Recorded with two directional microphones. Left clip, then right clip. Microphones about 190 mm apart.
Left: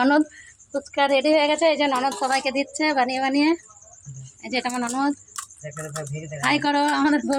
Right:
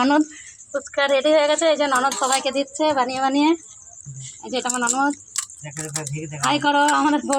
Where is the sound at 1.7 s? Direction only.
15° right (ahead or behind).